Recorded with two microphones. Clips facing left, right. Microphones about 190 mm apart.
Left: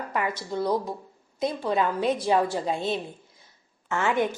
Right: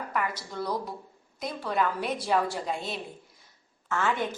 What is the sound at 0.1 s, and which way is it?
Speech, 25° left (ahead or behind).